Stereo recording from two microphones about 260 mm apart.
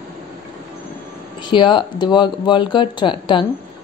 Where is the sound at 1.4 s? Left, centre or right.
Centre.